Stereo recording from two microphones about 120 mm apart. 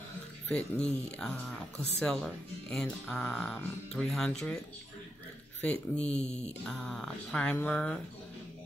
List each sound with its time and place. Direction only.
0.6 s speech: 10° left (ahead or behind)
5.6 s speech: 10° left (ahead or behind)
6.2 s music: 65° left (ahead or behind)
6.6 s speech: 5° left (ahead or behind)